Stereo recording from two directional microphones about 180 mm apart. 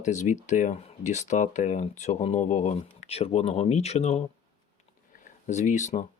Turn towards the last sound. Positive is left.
turn(degrees=40)  # may be behind; listen again after turning